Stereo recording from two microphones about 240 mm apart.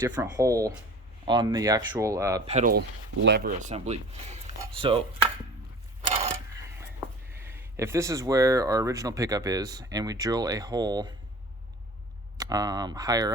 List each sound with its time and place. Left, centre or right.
0.2 s speech: centre
2.5 s speech: right
7.3 s speech: centre
12.4 s speech: centre